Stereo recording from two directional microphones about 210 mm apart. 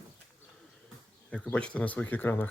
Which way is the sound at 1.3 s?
5° left (ahead or behind).